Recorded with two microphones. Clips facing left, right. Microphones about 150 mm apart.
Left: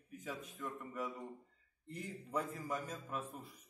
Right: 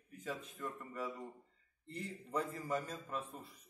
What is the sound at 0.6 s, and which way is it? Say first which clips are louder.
A man's voice: even; 5° left (ahead or behind).